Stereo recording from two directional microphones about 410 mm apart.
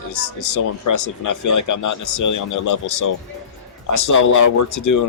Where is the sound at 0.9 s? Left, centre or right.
Left.